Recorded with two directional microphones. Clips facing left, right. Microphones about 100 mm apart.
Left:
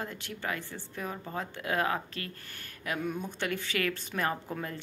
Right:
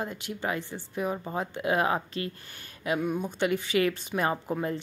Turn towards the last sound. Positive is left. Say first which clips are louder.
# right 6 dB
turn(degrees=-20)  # may be behind; listen again after turning